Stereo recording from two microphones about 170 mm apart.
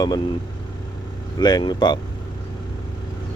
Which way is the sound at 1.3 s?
25° left (ahead or behind).